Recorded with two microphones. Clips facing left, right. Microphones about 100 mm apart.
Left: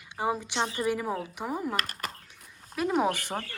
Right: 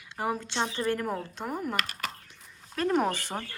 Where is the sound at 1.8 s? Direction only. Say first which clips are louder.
Right 1 dB; 40° left (ahead or behind).